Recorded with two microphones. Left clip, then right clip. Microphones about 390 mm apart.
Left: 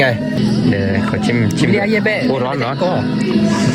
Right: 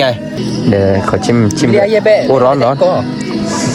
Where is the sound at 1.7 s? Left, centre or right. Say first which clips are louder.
Right 9 dB; right.